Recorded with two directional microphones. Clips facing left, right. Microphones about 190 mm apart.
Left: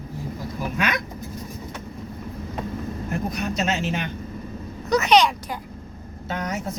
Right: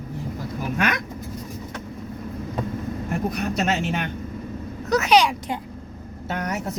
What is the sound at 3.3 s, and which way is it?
Speech, 60° right (ahead or behind).